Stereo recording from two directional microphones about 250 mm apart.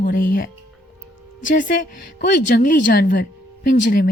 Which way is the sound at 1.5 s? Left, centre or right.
Left.